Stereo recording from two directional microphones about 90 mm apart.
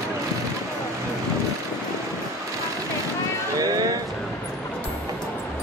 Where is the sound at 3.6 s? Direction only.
40° right (ahead or behind).